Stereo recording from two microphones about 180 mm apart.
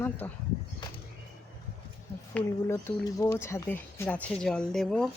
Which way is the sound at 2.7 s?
20° left (ahead or behind).